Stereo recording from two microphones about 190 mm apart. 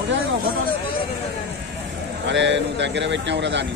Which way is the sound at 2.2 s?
70° right (ahead or behind).